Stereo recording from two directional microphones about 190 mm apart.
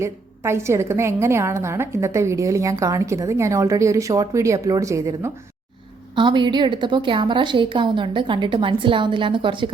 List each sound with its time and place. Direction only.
0.0 s a woman's voice: 15° right (ahead or behind)